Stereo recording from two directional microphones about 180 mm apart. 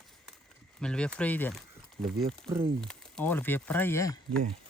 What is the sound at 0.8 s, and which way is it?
Speech, 5° left (ahead or behind).